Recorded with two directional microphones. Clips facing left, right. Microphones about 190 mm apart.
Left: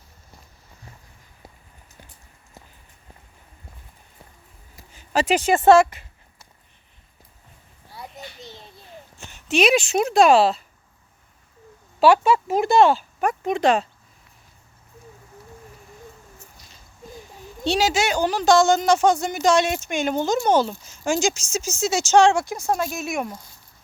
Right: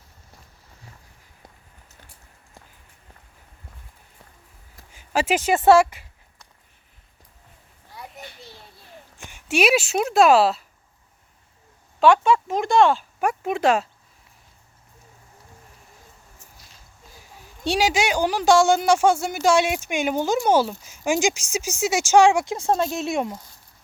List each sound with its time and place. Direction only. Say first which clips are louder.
4.9 s speech: left 1 dB; 10° right (ahead or behind)
7.9 s children playing: left 2 dB; 20° left (ahead or behind)
9.1 s speech: left 1 dB; 15° right (ahead or behind)
11.9 s speech: left 1 dB; 5° left (ahead or behind)
17.2 s speech: left 7 dB; 10° right (ahead or behind)
22.5 s speech: right 2 dB; 25° right (ahead or behind)